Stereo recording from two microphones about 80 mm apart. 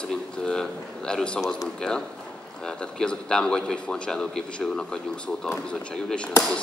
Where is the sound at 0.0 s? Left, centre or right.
Centre.